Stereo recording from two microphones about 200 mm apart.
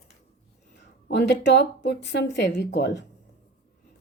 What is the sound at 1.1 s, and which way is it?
A woman's voice, 55° left (ahead or behind).